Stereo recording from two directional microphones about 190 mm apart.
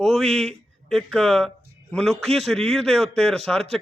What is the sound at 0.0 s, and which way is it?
A man's voice, centre (ahead or behind).